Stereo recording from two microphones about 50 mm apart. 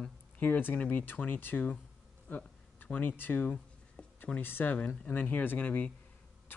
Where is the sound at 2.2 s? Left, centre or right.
Left.